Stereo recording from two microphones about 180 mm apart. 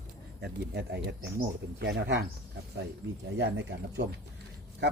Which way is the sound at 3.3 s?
75° right (ahead or behind).